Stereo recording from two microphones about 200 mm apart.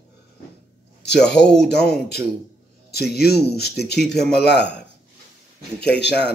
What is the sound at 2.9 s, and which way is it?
A man's voice, 50° left (ahead or behind).